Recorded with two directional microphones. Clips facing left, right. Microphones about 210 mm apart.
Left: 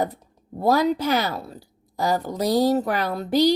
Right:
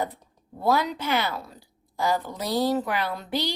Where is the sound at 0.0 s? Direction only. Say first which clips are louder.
Left 4 dB; 40° left (ahead or behind).